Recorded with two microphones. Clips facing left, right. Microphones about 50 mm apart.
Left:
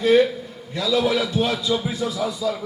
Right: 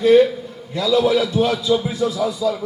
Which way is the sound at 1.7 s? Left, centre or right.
Centre.